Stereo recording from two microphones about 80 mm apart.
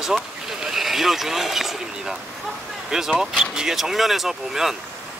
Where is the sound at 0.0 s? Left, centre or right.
Centre.